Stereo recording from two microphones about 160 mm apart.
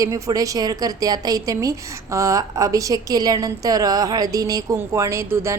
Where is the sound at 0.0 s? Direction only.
20° right (ahead or behind).